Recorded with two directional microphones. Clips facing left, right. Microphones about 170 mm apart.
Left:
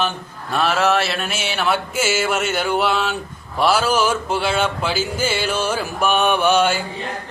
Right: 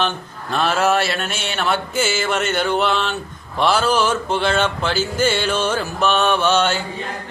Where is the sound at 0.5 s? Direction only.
5° left (ahead or behind).